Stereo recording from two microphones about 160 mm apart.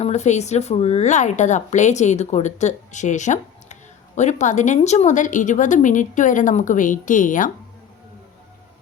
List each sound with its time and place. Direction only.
0.0 s a woman's voice: 45° left (ahead or behind)